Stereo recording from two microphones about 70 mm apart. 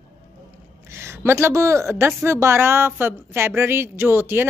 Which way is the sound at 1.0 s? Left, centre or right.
Right.